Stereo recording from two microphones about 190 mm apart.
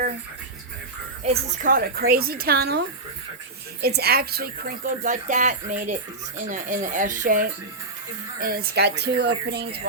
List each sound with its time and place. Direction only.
1.2 s speech: 35° right (ahead or behind)
1.7 s speech: 50° right (ahead or behind)